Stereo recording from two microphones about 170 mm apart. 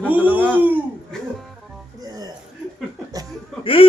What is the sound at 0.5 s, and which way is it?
Speech, 10° right (ahead or behind).